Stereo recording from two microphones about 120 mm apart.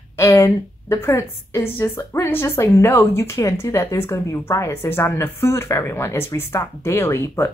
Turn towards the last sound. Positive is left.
turn(degrees=20)  # may be behind; listen again after turning